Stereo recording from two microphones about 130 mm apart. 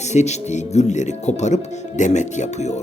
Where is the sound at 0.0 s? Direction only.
60° left (ahead or behind).